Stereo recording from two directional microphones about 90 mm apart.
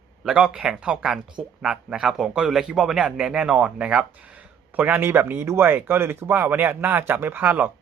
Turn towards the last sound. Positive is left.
turn(degrees=-20)  # may be behind; listen again after turning